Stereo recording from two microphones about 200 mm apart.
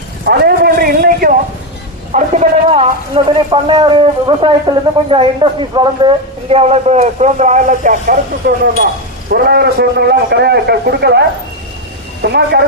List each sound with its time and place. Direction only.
0.3 s a sound: 50° right (ahead or behind)
2.1 s a man's voice: 35° right (ahead or behind); by 11.2 s 55° right (ahead or behind)
12.2 s a woman's voice: 55° right (ahead or behind)